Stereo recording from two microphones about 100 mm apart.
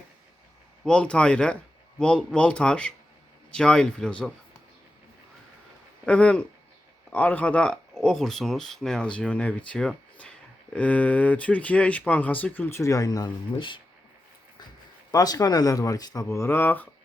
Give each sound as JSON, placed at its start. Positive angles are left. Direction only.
{"t": 0.9, "sound": "speech", "side_deg": 10}
{"t": 6.1, "sound": "speech", "side_deg": 10}
{"t": 12.8, "sound": "speech", "side_deg": 35}
{"t": 13.6, "sound": "speech", "side_deg": 55}
{"t": 15.1, "sound": "speech", "side_deg": 40}
{"t": 16.2, "sound": "speech", "side_deg": 30}